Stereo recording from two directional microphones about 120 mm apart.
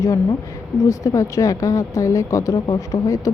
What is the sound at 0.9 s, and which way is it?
A woman's voice, 25° left (ahead or behind).